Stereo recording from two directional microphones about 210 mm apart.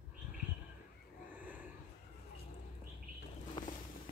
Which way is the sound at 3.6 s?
20° left (ahead or behind).